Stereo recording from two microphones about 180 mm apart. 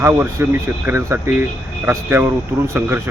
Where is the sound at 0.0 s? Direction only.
15° right (ahead or behind).